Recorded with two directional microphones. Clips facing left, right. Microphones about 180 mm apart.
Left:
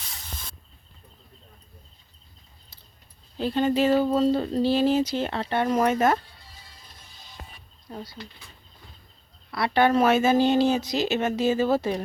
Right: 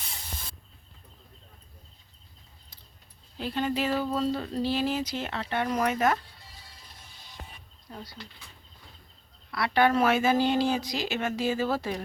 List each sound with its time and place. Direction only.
3.3 s speech: 30° left (ahead or behind)
7.9 s speech: 30° left (ahead or behind)
9.5 s speech: 25° left (ahead or behind)